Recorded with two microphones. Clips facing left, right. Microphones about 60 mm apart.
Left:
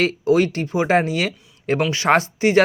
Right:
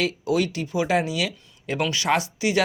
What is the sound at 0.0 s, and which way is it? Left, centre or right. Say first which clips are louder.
Speech: left 6 dB; left.